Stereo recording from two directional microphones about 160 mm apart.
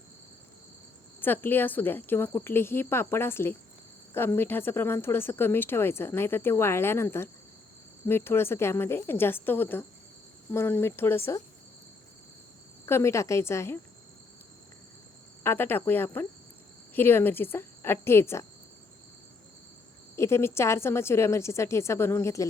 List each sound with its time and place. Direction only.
1.2 s speech: 15° left (ahead or behind)
12.8 s speech: 15° left (ahead or behind)
15.4 s speech: 15° left (ahead or behind)
20.1 s speech: 15° left (ahead or behind)